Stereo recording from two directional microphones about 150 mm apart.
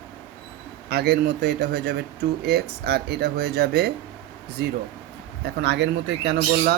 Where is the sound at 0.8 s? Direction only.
90° right.